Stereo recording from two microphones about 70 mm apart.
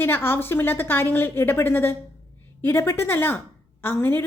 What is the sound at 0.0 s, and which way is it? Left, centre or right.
A woman's voice, left.